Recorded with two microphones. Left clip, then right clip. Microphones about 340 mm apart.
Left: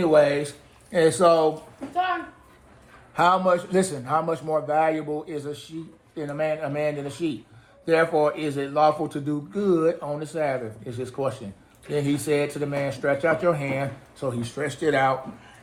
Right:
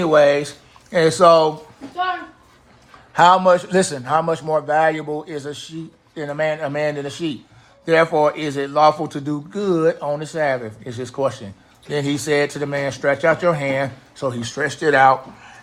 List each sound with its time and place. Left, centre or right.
0.0 s a man's voice: right
3.2 s a man's voice: right